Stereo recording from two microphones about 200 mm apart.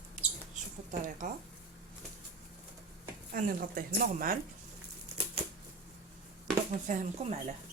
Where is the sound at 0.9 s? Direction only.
40° right (ahead or behind).